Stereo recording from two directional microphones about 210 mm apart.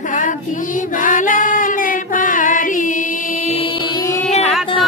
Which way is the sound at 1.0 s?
40° left (ahead or behind).